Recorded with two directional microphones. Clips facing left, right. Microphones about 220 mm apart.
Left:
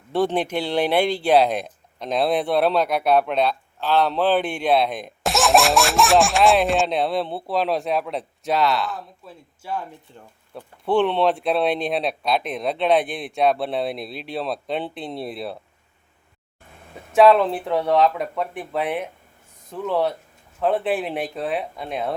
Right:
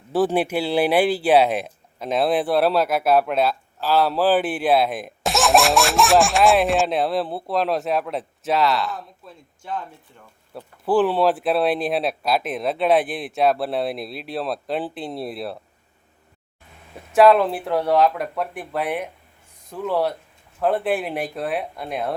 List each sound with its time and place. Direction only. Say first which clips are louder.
0.1 s speech: right 2 dB; 5° right (ahead or behind)
10.1 s speech: left 4 dB; 30° left (ahead or behind)
10.5 s speech: right 1 dB; 5° right (ahead or behind)
17.2 s speech: even; centre (ahead or behind)